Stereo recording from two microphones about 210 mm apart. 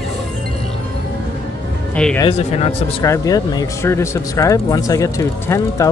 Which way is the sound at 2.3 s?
30° left (ahead or behind).